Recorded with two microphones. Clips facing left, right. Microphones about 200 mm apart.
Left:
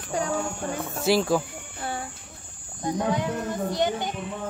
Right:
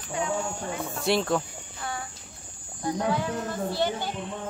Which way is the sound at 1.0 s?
Centre (ahead or behind).